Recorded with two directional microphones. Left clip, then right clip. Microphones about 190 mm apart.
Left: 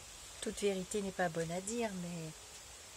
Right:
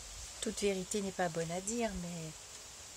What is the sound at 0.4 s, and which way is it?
Speech, 25° right (ahead or behind).